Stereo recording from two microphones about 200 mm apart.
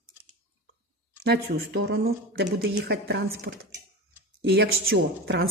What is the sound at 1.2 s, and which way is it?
A woman's voice, 55° right (ahead or behind).